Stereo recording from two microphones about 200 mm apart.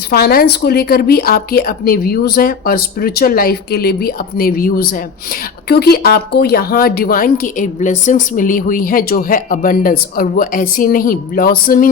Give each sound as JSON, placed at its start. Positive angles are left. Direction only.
{"t": 0.1, "sound": "a woman's voice", "side_deg": 50}